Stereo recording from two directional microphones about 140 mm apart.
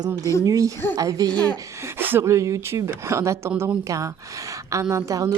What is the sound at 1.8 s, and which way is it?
A woman's voice, 15° right (ahead or behind).